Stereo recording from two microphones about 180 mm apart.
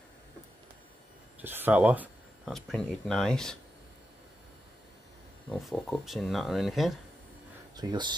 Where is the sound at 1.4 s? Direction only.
10° right (ahead or behind).